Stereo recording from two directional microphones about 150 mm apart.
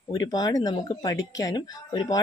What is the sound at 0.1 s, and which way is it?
Speech, 25° left (ahead or behind).